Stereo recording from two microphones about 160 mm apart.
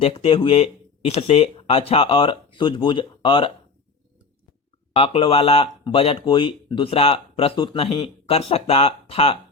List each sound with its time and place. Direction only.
0.0 s speech: 35° left (ahead or behind)
4.9 s speech: 35° left (ahead or behind)